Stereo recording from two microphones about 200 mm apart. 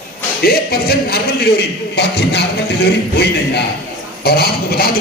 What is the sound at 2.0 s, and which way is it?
Speech, 55° left (ahead or behind).